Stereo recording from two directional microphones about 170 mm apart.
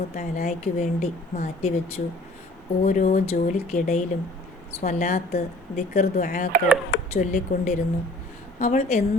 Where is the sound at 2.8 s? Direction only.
45° left (ahead or behind).